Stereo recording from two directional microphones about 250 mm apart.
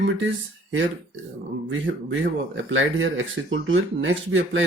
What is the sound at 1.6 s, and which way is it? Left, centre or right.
Speech, right.